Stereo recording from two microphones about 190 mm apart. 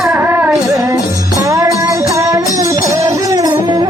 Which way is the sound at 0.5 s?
Centre (ahead or behind).